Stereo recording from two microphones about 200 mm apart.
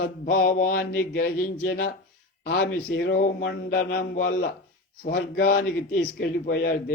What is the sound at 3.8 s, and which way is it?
Speech, 45° left (ahead or behind).